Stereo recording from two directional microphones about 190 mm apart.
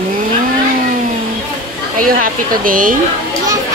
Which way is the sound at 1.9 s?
50° right (ahead or behind).